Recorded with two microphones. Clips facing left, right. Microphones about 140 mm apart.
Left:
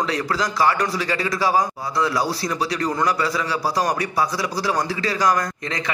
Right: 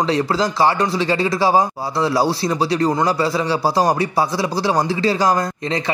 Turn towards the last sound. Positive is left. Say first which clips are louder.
# right 3 dB
turn(degrees=-30)  # may be behind; listen again after turning